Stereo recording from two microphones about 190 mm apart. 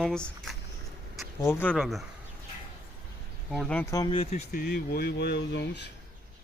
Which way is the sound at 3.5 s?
5° left (ahead or behind).